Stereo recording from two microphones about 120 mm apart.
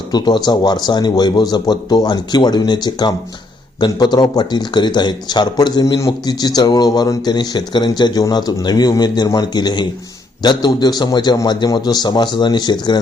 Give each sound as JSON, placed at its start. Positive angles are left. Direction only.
{"t": 0.1, "sound": "speech", "side_deg": 35}